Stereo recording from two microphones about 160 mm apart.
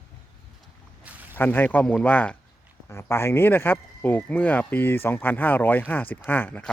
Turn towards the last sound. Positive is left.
turn(degrees=10)  # may be behind; listen again after turning